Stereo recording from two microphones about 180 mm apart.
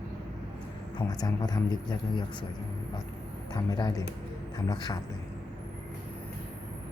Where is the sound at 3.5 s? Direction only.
20° left (ahead or behind).